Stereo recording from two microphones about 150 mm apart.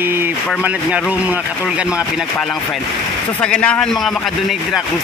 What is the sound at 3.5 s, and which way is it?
Speech, 5° left (ahead or behind).